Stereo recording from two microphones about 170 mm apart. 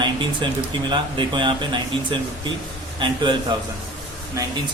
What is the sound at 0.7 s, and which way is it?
Speech, 30° right (ahead or behind).